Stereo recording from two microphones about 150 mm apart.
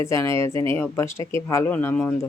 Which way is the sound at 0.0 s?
20° left (ahead or behind).